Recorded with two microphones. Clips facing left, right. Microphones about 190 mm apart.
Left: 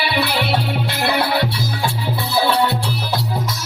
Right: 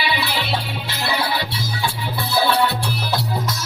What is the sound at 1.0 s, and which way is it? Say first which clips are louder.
Music: left 4 dB; 60° left (ahead or behind).